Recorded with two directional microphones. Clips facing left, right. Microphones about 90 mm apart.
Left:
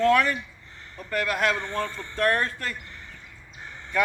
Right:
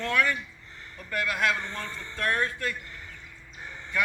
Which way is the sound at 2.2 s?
55° left (ahead or behind).